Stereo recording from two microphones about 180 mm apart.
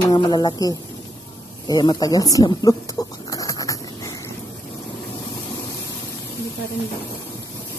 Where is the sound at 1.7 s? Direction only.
20° left (ahead or behind).